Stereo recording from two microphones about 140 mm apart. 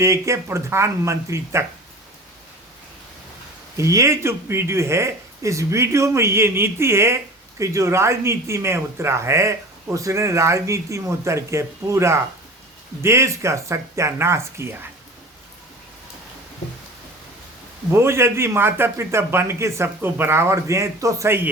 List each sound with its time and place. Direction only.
0.0 s speech: 20° right (ahead or behind)
3.8 s speech: 20° right (ahead or behind)
17.9 s speech: 20° right (ahead or behind)